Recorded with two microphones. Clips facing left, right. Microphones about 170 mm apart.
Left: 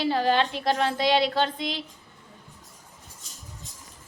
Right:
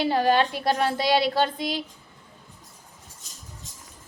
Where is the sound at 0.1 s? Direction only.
45° right (ahead or behind).